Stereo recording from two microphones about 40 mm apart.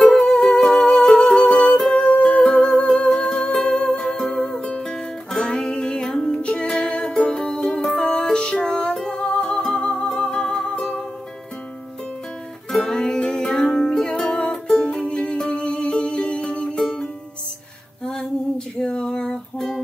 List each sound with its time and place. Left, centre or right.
0.0 s music: centre
2.0 s music: left; by 9.1 s centre
9.1 s music: left
12.8 s music: centre
18.8 s a sound: left